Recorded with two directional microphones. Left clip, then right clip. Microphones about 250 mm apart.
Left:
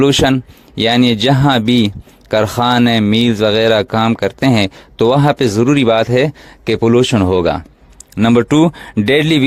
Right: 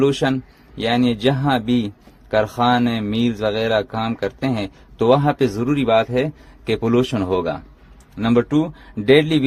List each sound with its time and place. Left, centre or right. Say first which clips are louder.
0.0 s speech: left 7 dB; left